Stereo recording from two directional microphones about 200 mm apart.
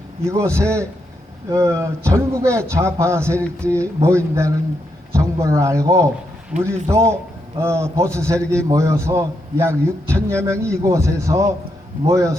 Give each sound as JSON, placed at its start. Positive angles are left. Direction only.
{"t": 0.3, "sound": "a man's voice", "side_deg": -15}